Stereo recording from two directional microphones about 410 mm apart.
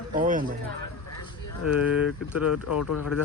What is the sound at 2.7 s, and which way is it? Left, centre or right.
Speech, left.